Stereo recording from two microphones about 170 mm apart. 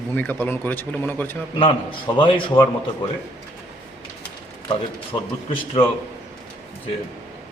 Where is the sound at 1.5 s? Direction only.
30° left (ahead or behind).